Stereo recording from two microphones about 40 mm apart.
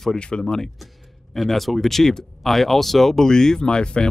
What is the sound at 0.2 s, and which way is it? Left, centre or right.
Speech, left.